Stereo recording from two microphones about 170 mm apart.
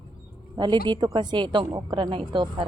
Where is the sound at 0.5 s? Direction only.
25° right (ahead or behind).